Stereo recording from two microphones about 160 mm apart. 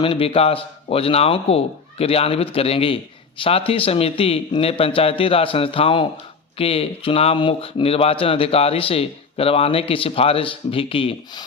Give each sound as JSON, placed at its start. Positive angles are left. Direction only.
{"t": 0.0, "sound": "speech", "side_deg": 35}